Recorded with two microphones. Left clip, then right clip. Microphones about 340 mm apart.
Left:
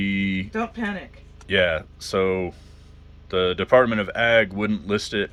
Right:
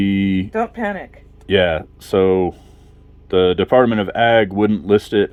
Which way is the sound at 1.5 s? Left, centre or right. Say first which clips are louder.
Right 5 dB; right.